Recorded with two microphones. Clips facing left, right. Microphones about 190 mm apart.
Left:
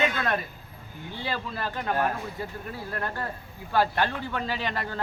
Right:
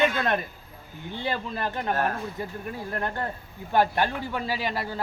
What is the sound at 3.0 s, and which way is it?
Speech, 20° right (ahead or behind).